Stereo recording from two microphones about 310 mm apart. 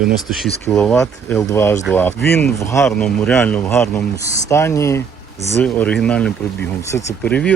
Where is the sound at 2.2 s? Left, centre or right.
Left.